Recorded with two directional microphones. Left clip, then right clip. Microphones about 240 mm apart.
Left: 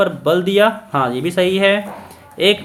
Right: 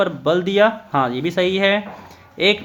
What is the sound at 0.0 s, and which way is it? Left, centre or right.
Speech, centre.